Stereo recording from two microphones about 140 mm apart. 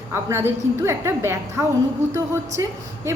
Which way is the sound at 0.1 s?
15° right (ahead or behind).